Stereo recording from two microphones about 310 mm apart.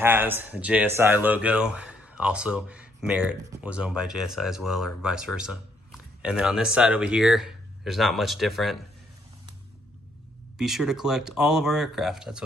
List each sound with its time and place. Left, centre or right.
0.0 s speech: centre
10.6 s speech: centre